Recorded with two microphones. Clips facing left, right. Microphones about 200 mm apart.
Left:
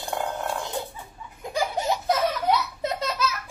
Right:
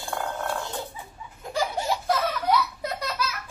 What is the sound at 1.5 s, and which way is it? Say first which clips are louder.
Baby laughter: left 1 dB; 20° left (ahead or behind).